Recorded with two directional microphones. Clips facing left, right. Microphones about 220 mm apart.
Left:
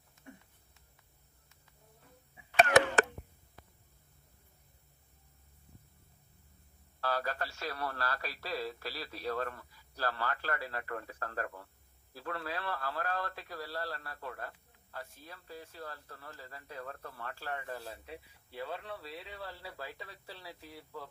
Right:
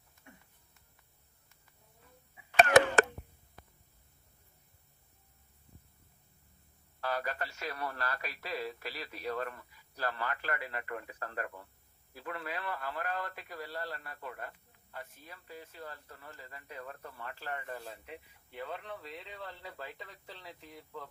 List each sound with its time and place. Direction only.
2.6 s cough: 45° right (ahead or behind)
7.0 s a man's voice: 15° right (ahead or behind)
17.7 s speech: 10° left (ahead or behind)